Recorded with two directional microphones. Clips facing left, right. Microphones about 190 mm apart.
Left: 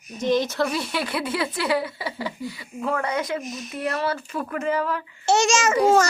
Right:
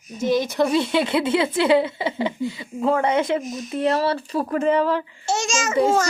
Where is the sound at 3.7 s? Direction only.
30° right (ahead or behind).